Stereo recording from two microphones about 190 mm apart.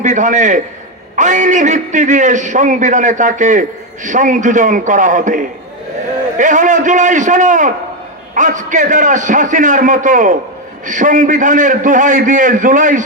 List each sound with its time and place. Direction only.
0.0 s a man's voice: 40° right (ahead or behind)